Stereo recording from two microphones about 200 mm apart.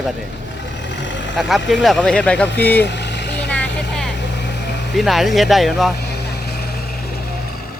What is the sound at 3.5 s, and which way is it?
Vehicle, 5° left (ahead or behind).